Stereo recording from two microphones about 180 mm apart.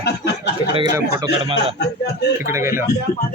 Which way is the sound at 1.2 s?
30° right (ahead or behind).